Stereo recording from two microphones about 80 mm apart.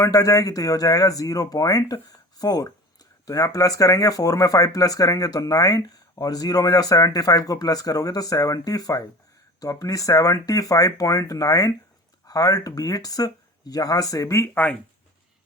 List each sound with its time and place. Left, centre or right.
0.0 s speech: left
14.5 s speech: left